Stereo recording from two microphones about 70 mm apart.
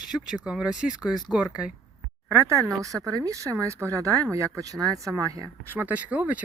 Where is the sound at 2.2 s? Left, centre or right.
Right.